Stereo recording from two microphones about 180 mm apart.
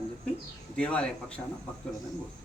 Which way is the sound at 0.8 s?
5° left (ahead or behind).